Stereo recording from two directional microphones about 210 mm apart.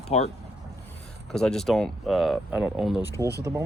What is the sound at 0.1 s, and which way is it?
Speech, 30° left (ahead or behind).